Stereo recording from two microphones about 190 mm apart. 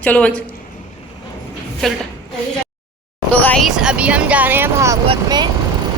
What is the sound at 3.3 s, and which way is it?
Speech, 5° left (ahead or behind).